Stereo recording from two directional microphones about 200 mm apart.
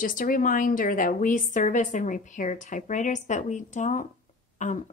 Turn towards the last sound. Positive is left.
turn(degrees=40)  # may be behind; listen again after turning